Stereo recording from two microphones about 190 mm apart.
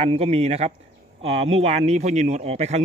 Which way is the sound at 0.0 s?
30° right (ahead or behind).